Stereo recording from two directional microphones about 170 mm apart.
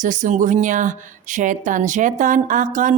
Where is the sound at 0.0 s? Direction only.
45° right (ahead or behind).